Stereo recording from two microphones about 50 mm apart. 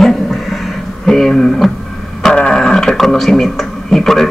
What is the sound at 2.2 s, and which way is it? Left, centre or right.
Wild animals, centre.